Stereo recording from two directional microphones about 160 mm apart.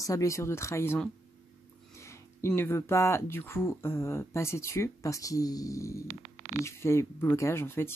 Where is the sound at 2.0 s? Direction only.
15° left (ahead or behind).